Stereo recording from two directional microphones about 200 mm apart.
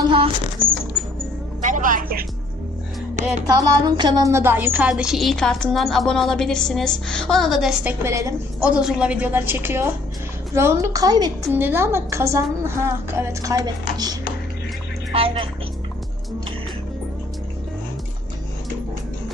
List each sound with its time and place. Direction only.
0.9 s music: centre (ahead or behind)
1.6 s a sound: 40° right (ahead or behind)
3.4 s a woman's voice: 20° right (ahead or behind); by 7.9 s centre (ahead or behind)
8.0 s a woman's voice: 15° right (ahead or behind)
8.8 s a woman's voice: 5° right (ahead or behind); by 15.4 s 30° right (ahead or behind)